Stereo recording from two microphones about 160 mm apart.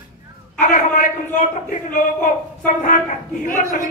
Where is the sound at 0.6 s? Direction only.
55° left (ahead or behind).